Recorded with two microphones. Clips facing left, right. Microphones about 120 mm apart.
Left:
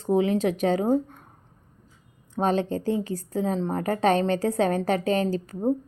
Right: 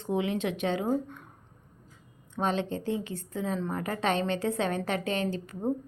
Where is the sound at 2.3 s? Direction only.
40° left (ahead or behind).